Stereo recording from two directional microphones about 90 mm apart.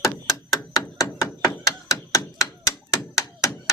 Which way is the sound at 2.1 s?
35° left (ahead or behind).